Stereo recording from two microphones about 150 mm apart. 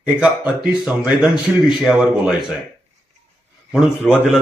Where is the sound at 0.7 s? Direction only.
5° right (ahead or behind).